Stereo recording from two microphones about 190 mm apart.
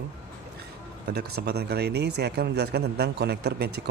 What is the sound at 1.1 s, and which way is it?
A man's voice, 55° right (ahead or behind).